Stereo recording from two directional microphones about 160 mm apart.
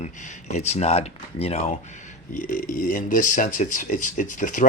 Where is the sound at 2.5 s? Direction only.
55° left (ahead or behind).